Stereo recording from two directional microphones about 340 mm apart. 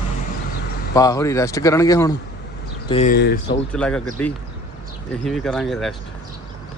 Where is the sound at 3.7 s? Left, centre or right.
Centre.